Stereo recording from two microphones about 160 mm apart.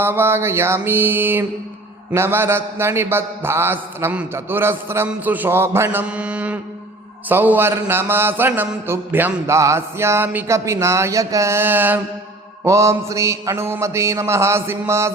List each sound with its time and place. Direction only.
0.0 s mantra: 15° right (ahead or behind)